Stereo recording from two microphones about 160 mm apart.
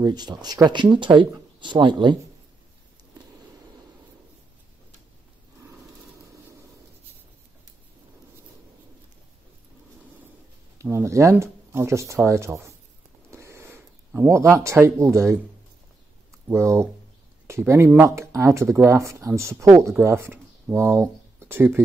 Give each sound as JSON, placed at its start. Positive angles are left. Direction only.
{"t": 0.0, "sound": "speech", "side_deg": -25}
{"t": 10.8, "sound": "speech", "side_deg": -20}
{"t": 13.3, "sound": "a sound", "side_deg": -20}
{"t": 14.5, "sound": "speech", "side_deg": -15}
{"t": 16.4, "sound": "speech", "side_deg": -15}